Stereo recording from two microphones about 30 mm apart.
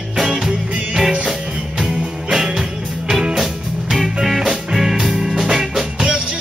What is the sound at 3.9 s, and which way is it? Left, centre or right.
Music, centre.